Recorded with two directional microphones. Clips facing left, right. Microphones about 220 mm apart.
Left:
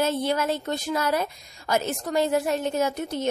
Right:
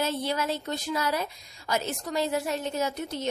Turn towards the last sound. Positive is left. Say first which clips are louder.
# left 4 dB
turn(degrees=50)  # may be behind; listen again after turning